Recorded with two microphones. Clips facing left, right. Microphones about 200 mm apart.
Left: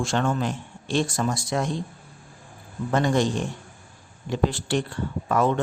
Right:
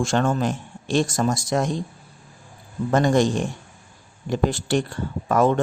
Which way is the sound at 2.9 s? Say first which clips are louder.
Right 4 dB; 45° right (ahead or behind).